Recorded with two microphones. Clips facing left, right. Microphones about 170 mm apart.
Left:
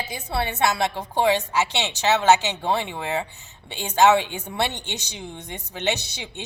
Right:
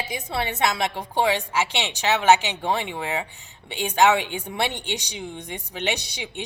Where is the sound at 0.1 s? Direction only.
20° right (ahead or behind).